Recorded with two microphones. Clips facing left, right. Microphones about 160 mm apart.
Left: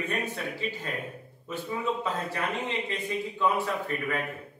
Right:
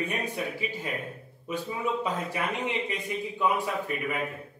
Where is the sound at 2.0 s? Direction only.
15° right (ahead or behind).